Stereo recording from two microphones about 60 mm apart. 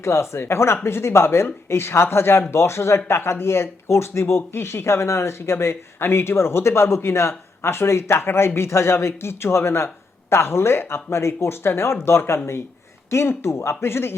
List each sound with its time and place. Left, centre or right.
0.0 s speech: left